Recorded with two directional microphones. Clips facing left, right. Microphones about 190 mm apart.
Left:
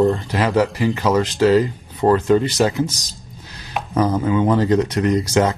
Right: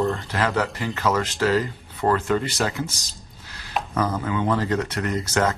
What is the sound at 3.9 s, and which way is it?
Speech, 25° left (ahead or behind).